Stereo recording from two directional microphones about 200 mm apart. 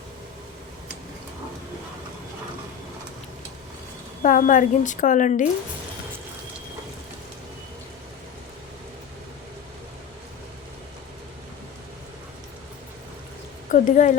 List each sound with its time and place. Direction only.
4.2 s a woman's voice: 40° left (ahead or behind)
13.7 s speech: 40° left (ahead or behind)